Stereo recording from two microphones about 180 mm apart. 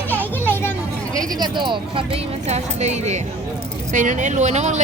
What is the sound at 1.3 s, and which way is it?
Speech, 25° right (ahead or behind).